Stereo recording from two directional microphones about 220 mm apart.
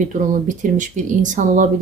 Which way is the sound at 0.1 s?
35° right (ahead or behind).